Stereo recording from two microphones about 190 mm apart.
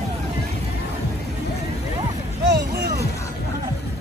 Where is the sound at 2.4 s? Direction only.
60° right (ahead or behind).